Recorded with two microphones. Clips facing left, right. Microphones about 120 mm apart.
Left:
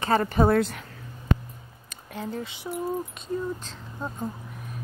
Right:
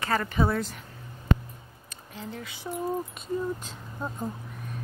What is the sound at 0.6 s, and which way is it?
Speech, 65° left (ahead or behind).